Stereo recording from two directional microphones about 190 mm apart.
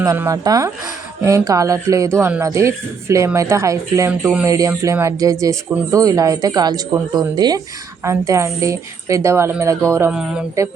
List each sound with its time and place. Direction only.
0.0 s speech: 15° right (ahead or behind)